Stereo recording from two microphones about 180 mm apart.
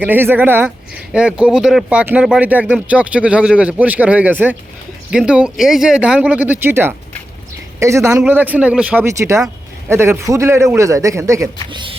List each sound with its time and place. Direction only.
0.0 s speech: 10° right (ahead or behind); by 11.9 s 25° right (ahead or behind)